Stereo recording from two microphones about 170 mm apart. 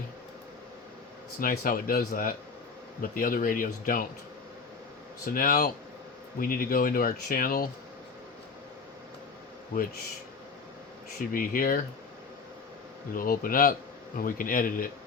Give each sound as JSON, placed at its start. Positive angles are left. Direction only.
{"t": 1.4, "sound": "speech", "side_deg": 55}
{"t": 5.2, "sound": "speech", "side_deg": 55}
{"t": 11.3, "sound": "speech", "side_deg": 55}
{"t": 13.1, "sound": "speech", "side_deg": 55}